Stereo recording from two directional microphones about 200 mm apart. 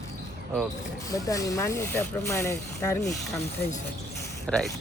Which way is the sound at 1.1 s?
15° left (ahead or behind).